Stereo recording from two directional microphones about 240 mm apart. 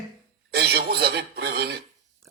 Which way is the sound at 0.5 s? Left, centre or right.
Right.